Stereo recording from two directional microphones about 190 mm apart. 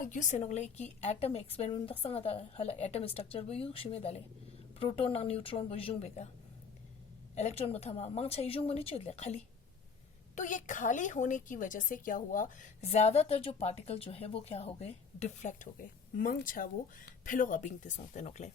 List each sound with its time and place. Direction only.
0.0 s a woman's voice: 40° left (ahead or behind)
7.3 s a woman's voice: 35° left (ahead or behind)